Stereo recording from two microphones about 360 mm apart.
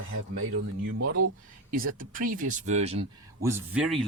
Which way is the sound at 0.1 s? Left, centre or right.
Right.